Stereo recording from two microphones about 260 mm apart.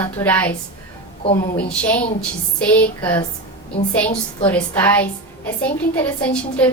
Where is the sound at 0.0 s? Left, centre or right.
Centre.